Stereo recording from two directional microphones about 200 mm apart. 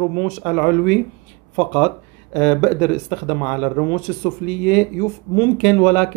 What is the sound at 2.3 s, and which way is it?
Speech, 10° left (ahead or behind).